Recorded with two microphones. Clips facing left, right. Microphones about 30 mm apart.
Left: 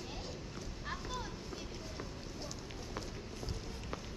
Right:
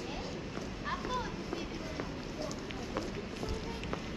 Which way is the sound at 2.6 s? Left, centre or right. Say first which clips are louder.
Right 6 dB; right.